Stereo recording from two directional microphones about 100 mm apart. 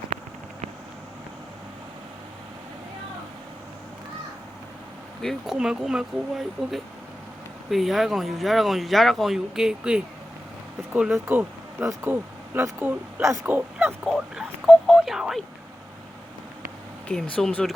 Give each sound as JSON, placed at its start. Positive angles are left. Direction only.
{"t": 5.2, "sound": "speech", "side_deg": 5}
{"t": 11.1, "sound": "speech", "side_deg": -20}
{"t": 13.6, "sound": "speech", "side_deg": -15}
{"t": 14.1, "sound": "a sound", "side_deg": -5}
{"t": 17.1, "sound": "speech", "side_deg": 10}